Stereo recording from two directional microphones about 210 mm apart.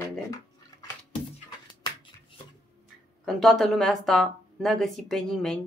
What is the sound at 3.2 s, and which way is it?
A woman's voice, centre (ahead or behind).